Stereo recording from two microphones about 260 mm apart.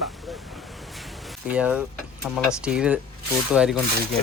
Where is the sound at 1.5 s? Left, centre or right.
Centre.